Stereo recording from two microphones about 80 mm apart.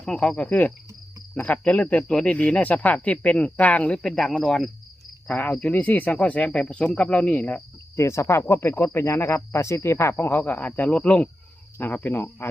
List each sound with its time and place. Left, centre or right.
0.0 s speech: centre
4.4 s cricket: centre
5.3 s speech: centre
7.9 s speech: left